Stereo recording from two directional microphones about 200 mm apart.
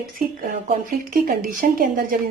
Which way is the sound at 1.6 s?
45° right (ahead or behind).